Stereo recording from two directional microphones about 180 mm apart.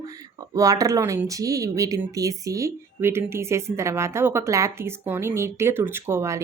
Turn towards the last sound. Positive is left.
turn(degrees=-15)  # may be behind; listen again after turning